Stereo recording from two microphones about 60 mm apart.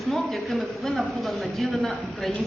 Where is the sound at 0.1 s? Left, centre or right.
Centre.